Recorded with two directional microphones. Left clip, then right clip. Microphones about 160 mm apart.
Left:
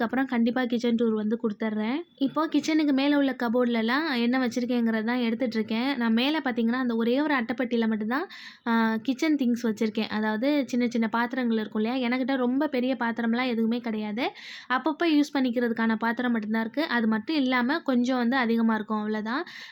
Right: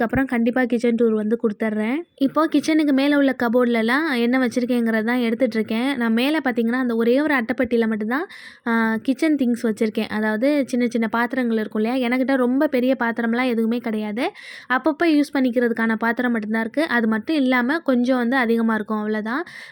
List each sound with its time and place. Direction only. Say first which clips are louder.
0.0 s speech: right 6 dB; 25° right (ahead or behind)